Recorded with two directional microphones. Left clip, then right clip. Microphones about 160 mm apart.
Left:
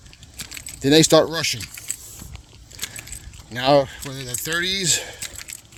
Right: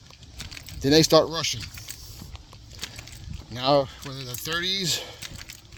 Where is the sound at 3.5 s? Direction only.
30° left (ahead or behind).